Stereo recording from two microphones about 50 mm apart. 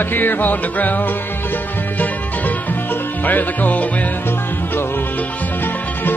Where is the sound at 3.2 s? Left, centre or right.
Left.